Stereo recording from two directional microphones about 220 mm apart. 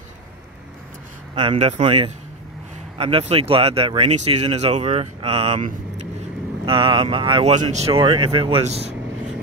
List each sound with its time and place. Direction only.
1.3 s speech: 25° right (ahead or behind)